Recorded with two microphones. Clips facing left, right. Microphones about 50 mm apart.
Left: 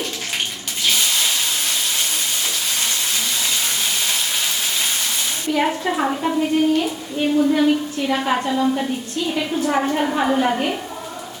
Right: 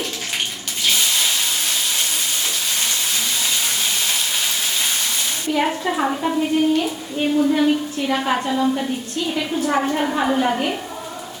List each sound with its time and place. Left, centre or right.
0.9 s water: centre
2.1 s frying: centre
4.8 s a sound: centre
5.5 s a woman's voice: centre